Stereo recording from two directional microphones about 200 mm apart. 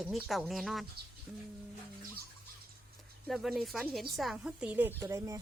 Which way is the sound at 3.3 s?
Centre (ahead or behind).